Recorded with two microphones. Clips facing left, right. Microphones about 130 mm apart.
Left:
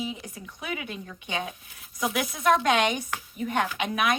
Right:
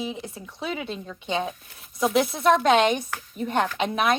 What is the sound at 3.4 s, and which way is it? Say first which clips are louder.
Speech: right 3 dB; 25° right (ahead or behind).